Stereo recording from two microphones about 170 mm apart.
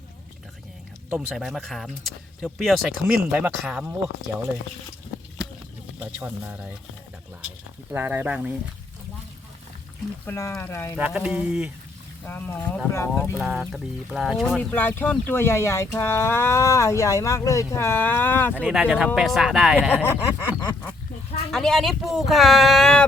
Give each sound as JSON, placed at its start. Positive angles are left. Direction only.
{"t": 1.4, "sound": "speech", "side_deg": 0}
{"t": 6.0, "sound": "speech", "side_deg": -10}
{"t": 7.9, "sound": "speech", "side_deg": -10}
{"t": 10.2, "sound": "speech", "side_deg": 15}
{"t": 10.9, "sound": "speech", "side_deg": -5}
{"t": 12.2, "sound": "speech", "side_deg": 10}
{"t": 13.4, "sound": "speech", "side_deg": 0}
{"t": 18.6, "sound": "speech", "side_deg": -5}
{"t": 19.9, "sound": "speech", "side_deg": 10}
{"t": 21.5, "sound": "speech", "side_deg": 0}